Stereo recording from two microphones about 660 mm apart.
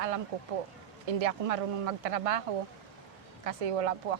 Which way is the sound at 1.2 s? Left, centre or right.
Right.